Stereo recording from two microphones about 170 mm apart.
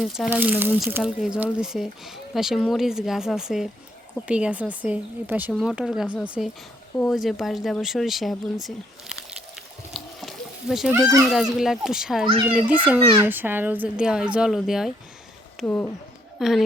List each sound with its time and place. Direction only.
0.3 s a woman's voice: 10° right (ahead or behind)
9.9 s a sound: centre (ahead or behind)
10.9 s a woman's voice: 20° right (ahead or behind)
11.3 s a woman's voice: centre (ahead or behind)
15.6 s speech: 10° left (ahead or behind)
16.4 s speech: centre (ahead or behind)